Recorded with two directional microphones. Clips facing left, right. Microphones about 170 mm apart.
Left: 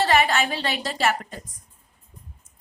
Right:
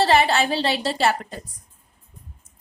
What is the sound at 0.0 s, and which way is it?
A woman's voice, 30° right (ahead or behind).